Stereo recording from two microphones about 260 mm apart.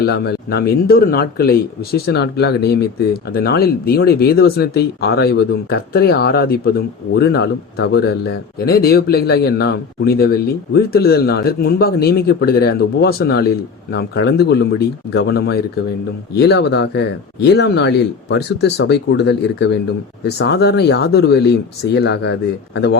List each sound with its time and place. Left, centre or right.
0.0 s speech: left